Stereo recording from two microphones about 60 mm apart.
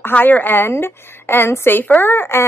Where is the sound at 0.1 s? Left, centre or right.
Left.